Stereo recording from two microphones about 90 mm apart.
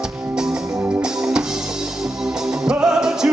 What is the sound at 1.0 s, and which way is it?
Music, 10° right (ahead or behind).